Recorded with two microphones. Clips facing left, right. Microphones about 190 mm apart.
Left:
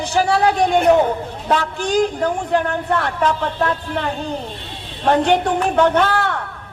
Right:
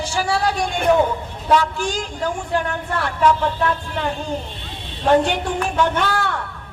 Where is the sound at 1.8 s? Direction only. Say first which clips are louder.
Left 6 dB; 60° left (ahead or behind).